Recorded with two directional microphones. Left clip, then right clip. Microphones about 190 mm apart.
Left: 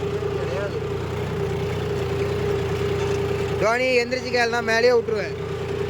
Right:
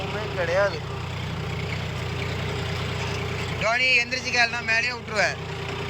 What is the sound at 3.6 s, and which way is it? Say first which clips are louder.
Speech: even; 20° left (ahead or behind).